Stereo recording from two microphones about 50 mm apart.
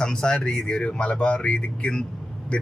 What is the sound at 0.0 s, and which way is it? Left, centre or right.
Speech, centre.